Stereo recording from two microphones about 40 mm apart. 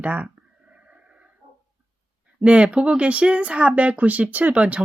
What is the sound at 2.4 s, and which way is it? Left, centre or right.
Speech, right.